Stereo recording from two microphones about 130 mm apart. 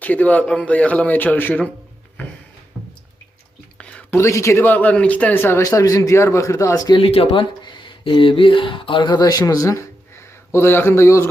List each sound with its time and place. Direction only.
0.0 s speech: 10° left (ahead or behind)
3.8 s a sound: 10° left (ahead or behind)
4.2 s speech: 20° left (ahead or behind)
7.0 s speech: 50° left (ahead or behind); by 11.3 s 20° left (ahead or behind)